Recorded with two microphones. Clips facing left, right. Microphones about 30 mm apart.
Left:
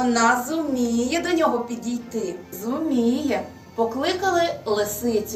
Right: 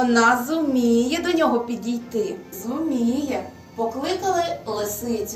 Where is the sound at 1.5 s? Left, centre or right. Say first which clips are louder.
Right 2 dB; right.